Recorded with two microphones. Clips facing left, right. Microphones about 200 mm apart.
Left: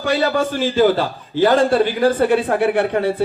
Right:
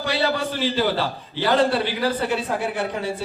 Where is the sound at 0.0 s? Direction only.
45° left (ahead or behind).